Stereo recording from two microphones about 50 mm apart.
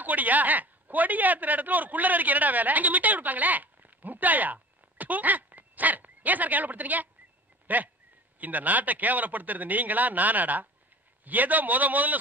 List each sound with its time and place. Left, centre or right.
0.0 s speech: right